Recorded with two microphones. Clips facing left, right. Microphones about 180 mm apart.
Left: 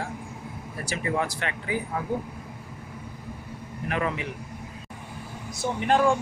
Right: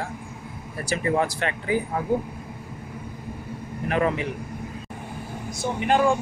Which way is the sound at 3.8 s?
35° right (ahead or behind).